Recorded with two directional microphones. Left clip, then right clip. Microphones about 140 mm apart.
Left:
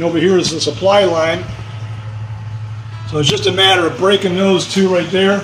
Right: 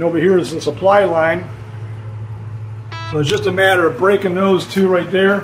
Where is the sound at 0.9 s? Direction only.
35° left (ahead or behind).